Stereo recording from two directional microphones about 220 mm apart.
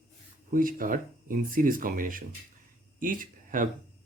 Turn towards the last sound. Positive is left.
turn(degrees=-35)  # may be behind; listen again after turning